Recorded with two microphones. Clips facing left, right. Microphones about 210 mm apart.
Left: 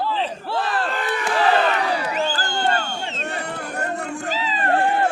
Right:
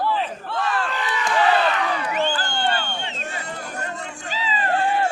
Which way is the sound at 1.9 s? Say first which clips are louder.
Left 1 dB; 35° left (ahead or behind).